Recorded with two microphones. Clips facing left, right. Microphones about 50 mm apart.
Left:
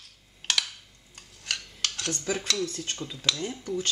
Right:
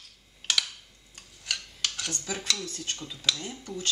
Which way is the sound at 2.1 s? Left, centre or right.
Left.